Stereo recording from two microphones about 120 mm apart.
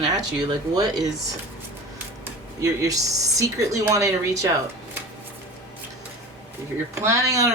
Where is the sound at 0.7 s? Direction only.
35° right (ahead or behind).